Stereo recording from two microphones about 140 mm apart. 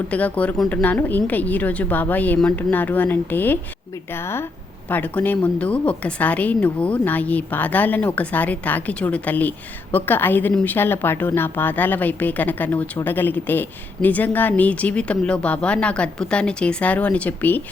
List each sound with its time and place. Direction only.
0.1 s a woman's voice: 10° left (ahead or behind)